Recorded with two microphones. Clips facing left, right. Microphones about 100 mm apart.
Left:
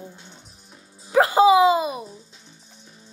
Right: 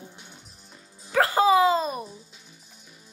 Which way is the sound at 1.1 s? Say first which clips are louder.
Left 5 dB; 15° left (ahead or behind).